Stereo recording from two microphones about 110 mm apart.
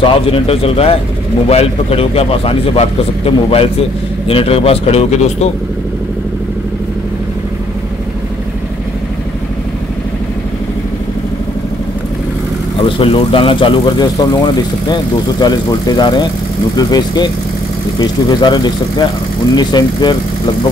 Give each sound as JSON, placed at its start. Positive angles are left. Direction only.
{"t": 0.0, "sound": "a man's voice", "side_deg": 60}
{"t": 12.8, "sound": "speech", "side_deg": 55}